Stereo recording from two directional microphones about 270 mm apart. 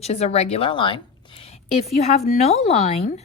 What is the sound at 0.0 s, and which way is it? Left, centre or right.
A woman's voice, left.